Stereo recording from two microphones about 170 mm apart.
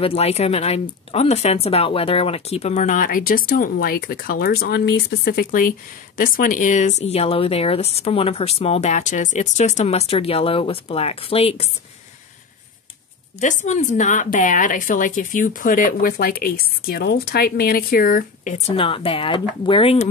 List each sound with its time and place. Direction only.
0.0 s speech: 35° left (ahead or behind)
13.4 s a woman's voice: 45° left (ahead or behind)
18.8 s speech: 30° left (ahead or behind)